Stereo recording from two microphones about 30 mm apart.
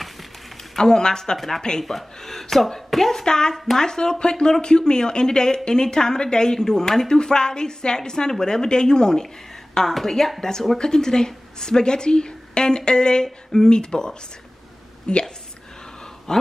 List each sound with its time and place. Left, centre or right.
0.7 s speech: left
1.9 s speech: centre
3.3 s speech: left
3.5 s speech: centre
9.8 s speech: centre
10.8 s a woman's voice: left
16.3 s speech: left